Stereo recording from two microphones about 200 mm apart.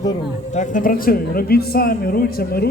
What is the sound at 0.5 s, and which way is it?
Speech, 40° left (ahead or behind).